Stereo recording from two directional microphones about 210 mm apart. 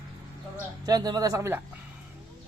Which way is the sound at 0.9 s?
20° right (ahead or behind).